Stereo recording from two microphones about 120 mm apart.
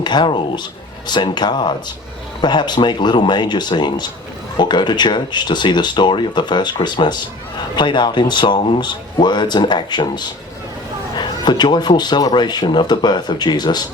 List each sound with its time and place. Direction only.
0.0 s speech: 40° left (ahead or behind)